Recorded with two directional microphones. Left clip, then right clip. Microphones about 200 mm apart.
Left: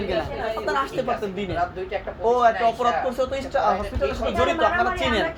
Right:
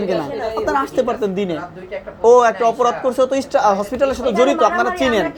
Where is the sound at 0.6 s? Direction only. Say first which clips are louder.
Right 8 dB; 35° right (ahead or behind).